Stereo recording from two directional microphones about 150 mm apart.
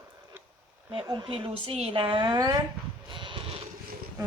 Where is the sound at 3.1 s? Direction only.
35° right (ahead or behind).